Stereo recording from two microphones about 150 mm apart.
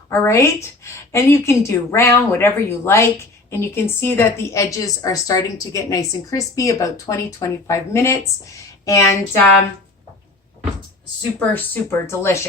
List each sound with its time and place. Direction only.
0.1 s a woman's voice: 20° left (ahead or behind)
11.3 s speech: 10° left (ahead or behind)